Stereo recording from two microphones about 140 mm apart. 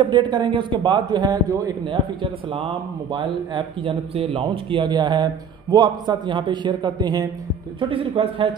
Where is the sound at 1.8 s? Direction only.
40° right (ahead or behind).